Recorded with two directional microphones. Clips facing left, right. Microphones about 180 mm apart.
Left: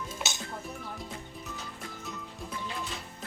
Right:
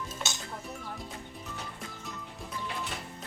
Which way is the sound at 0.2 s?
5° left (ahead or behind).